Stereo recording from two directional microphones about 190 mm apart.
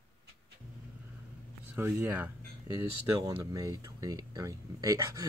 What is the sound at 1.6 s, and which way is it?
Speech, 10° right (ahead or behind).